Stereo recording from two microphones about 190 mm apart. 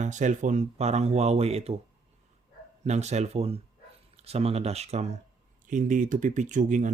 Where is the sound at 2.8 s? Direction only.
35° right (ahead or behind).